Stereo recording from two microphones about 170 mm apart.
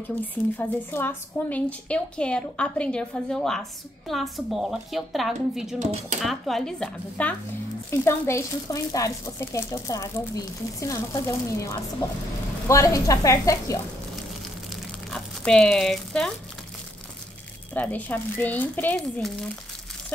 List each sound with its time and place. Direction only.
0.2 s a woman's voice: 10° left (ahead or behind)
5.8 s speech: 45° right (ahead or behind)
6.2 s a woman's voice: centre (ahead or behind); by 13.7 s 20° left (ahead or behind)
14.7 s crumpling: centre (ahead or behind)
17.7 s speech: 10° left (ahead or behind)